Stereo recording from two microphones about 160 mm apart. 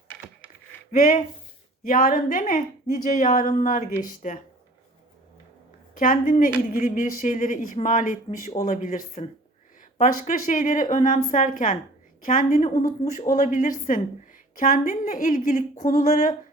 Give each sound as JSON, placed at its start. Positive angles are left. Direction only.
{"t": 0.9, "sound": "speech", "side_deg": 55}
{"t": 5.9, "sound": "speech", "side_deg": 60}